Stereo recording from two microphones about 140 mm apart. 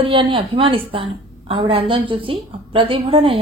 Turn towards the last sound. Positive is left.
turn(degrees=-40)  # may be behind; listen again after turning